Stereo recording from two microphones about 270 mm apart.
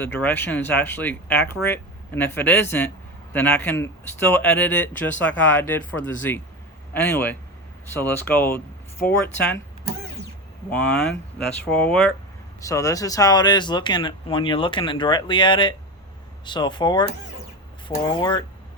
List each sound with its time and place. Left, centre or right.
0.0 s speech: centre
10.7 s speech: centre